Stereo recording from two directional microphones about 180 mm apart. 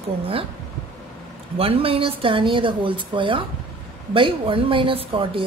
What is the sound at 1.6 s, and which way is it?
Speech, 30° right (ahead or behind).